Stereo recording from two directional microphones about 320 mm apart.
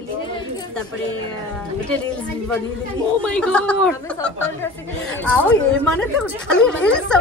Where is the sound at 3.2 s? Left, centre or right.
Centre.